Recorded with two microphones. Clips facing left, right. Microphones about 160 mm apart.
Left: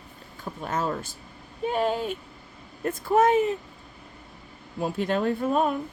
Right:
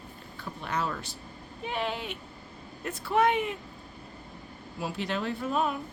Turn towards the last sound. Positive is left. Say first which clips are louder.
# left 5 dB
turn(degrees=45)  # may be behind; listen again after turning